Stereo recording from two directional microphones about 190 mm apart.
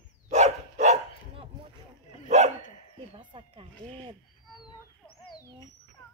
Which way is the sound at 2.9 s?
25° right (ahead or behind).